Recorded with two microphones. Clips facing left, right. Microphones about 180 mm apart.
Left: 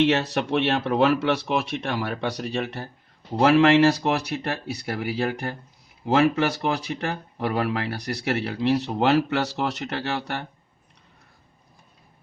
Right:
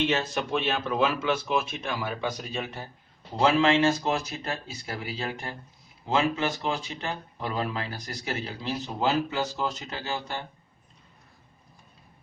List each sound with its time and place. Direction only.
0.0 s speech: 70° left (ahead or behind)